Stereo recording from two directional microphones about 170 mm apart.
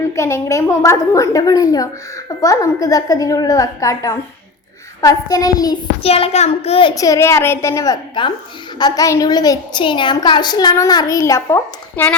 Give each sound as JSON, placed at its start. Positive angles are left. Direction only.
{"t": 0.2, "sound": "a woman's voice", "side_deg": 15}
{"t": 6.0, "sound": "a child's voice", "side_deg": 35}
{"t": 6.9, "sound": "a woman's voice", "side_deg": 20}